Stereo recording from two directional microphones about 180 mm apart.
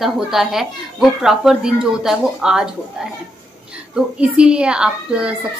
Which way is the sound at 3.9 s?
5° right (ahead or behind).